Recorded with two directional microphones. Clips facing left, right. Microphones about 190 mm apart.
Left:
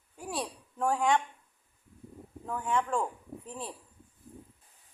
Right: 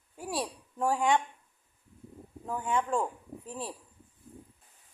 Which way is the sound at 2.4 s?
20° right (ahead or behind).